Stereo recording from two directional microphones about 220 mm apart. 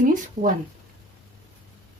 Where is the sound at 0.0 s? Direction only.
35° right (ahead or behind).